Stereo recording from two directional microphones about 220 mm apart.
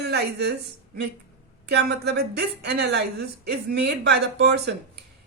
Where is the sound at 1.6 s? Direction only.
50° right (ahead or behind).